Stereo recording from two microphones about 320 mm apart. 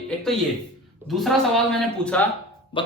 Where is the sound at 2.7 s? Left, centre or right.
Centre.